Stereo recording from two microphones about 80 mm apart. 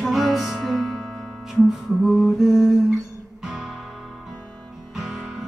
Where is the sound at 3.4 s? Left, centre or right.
Centre.